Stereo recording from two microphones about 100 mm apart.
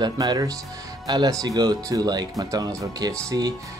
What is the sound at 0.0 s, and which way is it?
Speech, 45° right (ahead or behind).